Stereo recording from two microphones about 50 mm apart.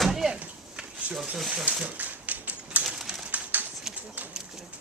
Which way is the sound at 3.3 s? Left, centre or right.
Right.